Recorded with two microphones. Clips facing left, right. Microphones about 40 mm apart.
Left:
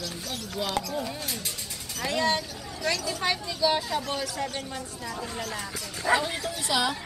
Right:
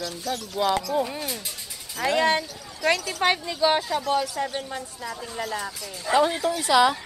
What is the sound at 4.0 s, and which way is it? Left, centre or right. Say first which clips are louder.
Speech: right 6 dB; centre.